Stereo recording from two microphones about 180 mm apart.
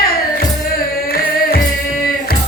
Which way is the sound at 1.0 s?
55° left (ahead or behind).